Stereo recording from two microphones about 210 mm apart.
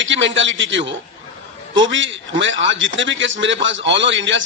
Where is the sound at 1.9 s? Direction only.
60° right (ahead or behind).